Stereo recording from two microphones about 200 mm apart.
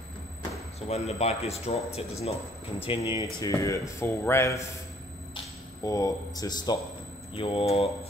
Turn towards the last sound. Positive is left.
turn(degrees=30)  # may be behind; listen again after turning